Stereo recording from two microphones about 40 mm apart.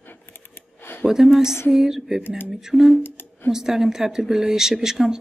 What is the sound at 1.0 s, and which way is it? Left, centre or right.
Speech, centre.